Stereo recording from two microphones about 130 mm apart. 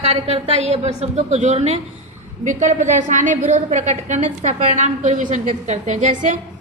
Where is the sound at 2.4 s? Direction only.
70° right (ahead or behind).